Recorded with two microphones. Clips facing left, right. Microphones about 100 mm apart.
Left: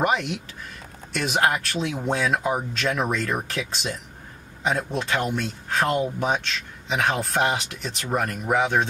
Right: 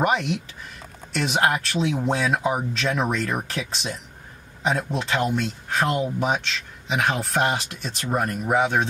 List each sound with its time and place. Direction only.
0.0 s speech: centre (ahead or behind)
7.6 s speech: 30° right (ahead or behind)
8.5 s speech: centre (ahead or behind)